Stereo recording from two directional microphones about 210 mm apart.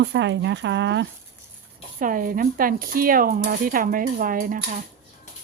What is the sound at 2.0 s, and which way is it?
Speech, 40° right (ahead or behind).